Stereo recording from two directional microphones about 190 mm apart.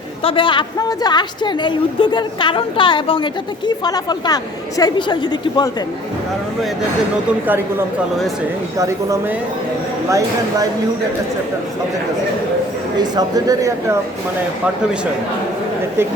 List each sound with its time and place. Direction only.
0.2 s a woman's voice: 30° left (ahead or behind)
8.8 s speech: 15° right (ahead or behind)
13.0 s speech: 20° right (ahead or behind)